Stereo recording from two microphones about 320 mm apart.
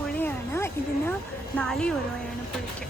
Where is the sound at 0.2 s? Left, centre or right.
Centre.